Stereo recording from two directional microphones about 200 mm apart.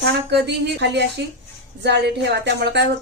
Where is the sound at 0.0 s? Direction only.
60° right (ahead or behind).